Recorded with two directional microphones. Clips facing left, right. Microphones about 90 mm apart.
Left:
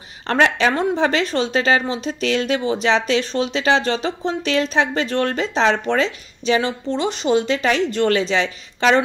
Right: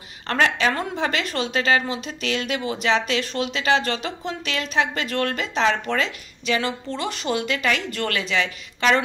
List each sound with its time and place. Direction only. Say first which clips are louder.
0.3 s speech: left 4 dB; 30° left (ahead or behind)